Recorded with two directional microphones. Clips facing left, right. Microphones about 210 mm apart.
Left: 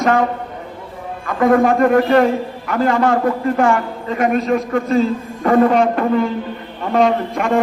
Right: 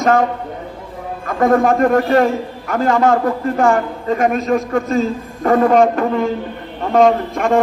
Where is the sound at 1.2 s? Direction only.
45° right (ahead or behind).